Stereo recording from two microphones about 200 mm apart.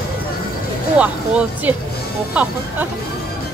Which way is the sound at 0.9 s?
5° right (ahead or behind).